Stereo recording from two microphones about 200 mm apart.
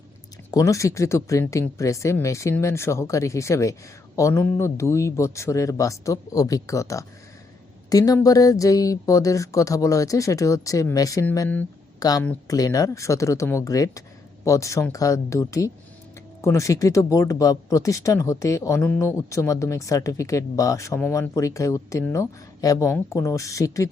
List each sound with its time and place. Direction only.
0.5 s speech: 15° left (ahead or behind)